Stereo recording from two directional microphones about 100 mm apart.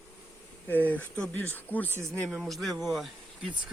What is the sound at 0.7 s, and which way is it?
Speech, 20° left (ahead or behind).